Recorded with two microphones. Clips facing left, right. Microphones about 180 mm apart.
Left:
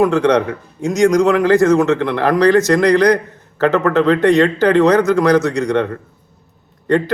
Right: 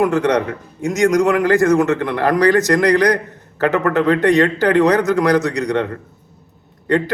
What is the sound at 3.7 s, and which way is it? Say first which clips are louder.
A man's voice: left 2 dB; 15° right (ahead or behind).